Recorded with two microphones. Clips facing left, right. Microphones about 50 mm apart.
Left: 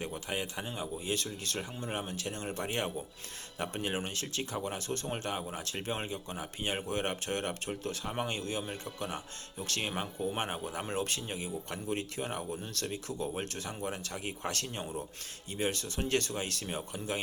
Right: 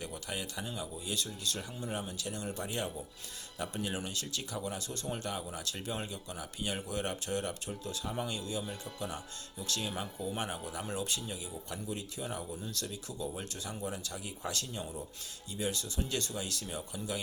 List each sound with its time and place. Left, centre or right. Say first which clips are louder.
0.0 s speech: left 4 dB; left